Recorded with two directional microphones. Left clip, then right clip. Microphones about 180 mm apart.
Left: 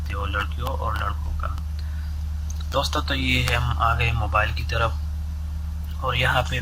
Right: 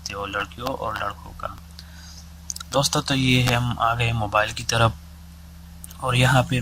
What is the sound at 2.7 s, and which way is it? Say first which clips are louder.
Speech: right 2 dB; 40° right (ahead or behind).